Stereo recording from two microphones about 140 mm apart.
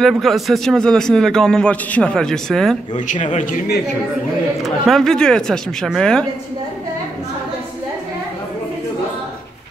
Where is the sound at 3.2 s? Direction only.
65° left (ahead or behind).